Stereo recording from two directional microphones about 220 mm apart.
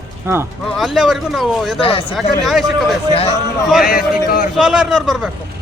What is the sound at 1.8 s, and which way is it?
Speech, 25° left (ahead or behind).